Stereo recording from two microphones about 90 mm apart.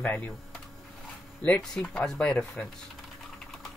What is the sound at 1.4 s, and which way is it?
Speech, 10° left (ahead or behind).